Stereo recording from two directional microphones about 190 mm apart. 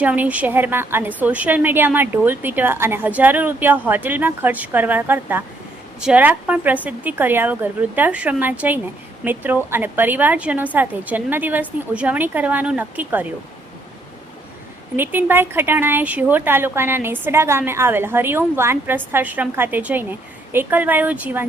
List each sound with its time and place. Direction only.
0.0 s speech: 10° right (ahead or behind)
14.9 s speech: 10° right (ahead or behind)